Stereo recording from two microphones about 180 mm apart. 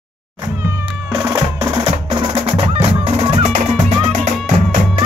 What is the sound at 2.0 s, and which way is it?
Music, 30° right (ahead or behind).